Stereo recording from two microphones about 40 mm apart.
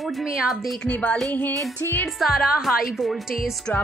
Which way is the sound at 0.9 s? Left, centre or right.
Left.